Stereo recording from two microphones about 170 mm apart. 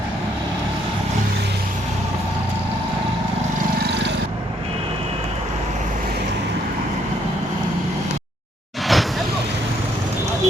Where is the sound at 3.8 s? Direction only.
90° right.